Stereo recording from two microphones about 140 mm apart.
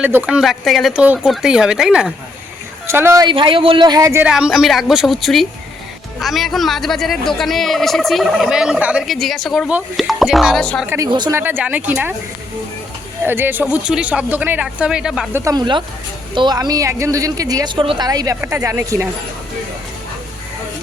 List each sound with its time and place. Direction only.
0.0 s speech: 10° right (ahead or behind)
1.0 s speech: 10° right (ahead or behind)
2.8 s speech: 20° right (ahead or behind)
3.2 s speech: 35° right (ahead or behind)
4.2 s speech: 5° right (ahead or behind)
10.8 s speech: 20° right (ahead or behind)
13.2 s speech: 15° right (ahead or behind)
15.3 s speech: 20° right (ahead or behind)
15.5 s speech: 35° right (ahead or behind); by 19.0 s 20° right (ahead or behind)